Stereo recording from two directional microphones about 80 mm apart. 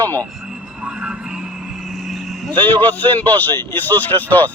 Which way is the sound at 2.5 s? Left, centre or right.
Left.